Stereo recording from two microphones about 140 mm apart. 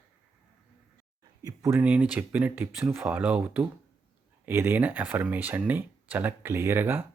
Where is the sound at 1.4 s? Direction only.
20° right (ahead or behind).